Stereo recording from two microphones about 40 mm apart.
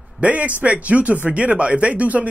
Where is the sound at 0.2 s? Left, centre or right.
Right.